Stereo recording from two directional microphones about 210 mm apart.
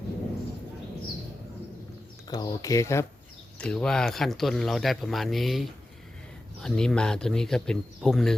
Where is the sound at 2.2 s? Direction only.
20° left (ahead or behind).